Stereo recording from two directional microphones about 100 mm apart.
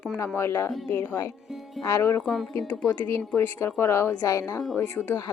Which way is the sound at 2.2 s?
Centre (ahead or behind).